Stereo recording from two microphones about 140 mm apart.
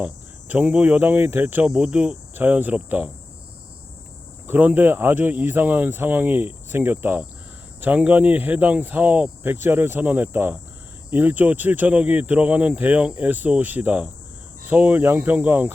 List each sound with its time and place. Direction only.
0.0 s speech: 10° right (ahead or behind)
4.4 s speech: 15° right (ahead or behind)